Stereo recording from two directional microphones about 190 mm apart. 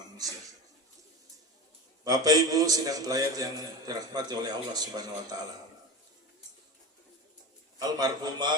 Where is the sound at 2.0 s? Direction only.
20° right (ahead or behind).